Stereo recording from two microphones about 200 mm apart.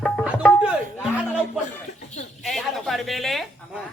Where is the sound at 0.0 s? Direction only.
Centre (ahead or behind).